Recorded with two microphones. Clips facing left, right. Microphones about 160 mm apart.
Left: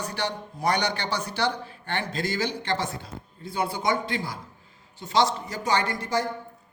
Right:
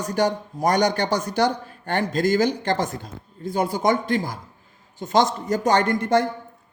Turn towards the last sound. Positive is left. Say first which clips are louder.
# right 6 dB
turn(degrees=-55)  # may be behind; listen again after turning